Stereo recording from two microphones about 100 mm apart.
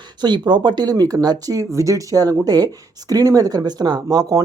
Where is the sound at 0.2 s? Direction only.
45° right (ahead or behind).